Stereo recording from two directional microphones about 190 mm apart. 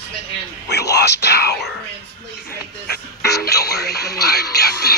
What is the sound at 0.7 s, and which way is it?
Whispering, 60° left (ahead or behind).